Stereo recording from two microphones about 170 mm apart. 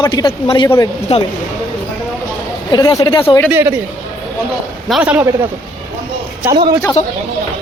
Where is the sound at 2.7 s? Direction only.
20° left (ahead or behind).